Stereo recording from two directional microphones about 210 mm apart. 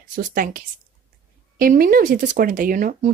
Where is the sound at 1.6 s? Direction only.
40° right (ahead or behind).